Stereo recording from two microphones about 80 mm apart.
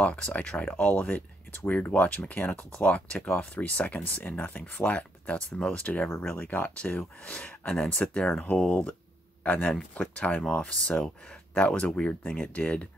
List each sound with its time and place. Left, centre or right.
0.0 s speech: centre